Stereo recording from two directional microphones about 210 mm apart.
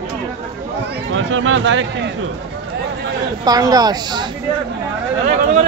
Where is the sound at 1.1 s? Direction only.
65° right (ahead or behind).